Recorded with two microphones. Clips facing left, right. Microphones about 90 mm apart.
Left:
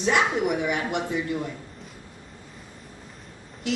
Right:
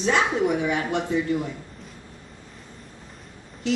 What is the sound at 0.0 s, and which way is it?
Speech, 10° left (ahead or behind).